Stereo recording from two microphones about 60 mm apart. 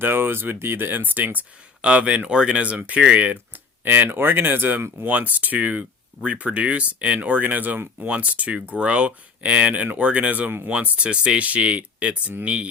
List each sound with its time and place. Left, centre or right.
0.0 s speech: right